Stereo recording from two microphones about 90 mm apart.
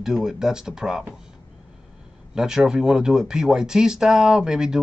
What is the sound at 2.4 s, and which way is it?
Speech, 5° right (ahead or behind).